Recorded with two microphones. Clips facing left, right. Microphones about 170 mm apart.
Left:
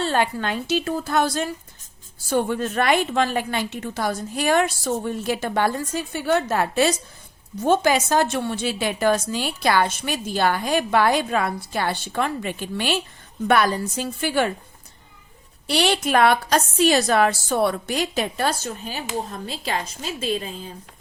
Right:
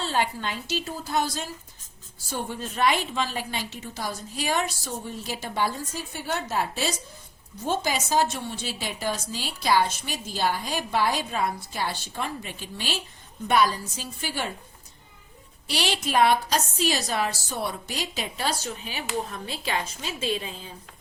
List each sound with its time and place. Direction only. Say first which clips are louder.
0.0 s a woman's voice: left 5 dB; 65° left (ahead or behind)
15.6 s a woman's voice: left 7 dB; 60° left (ahead or behind); by 20.7 s 40° left (ahead or behind)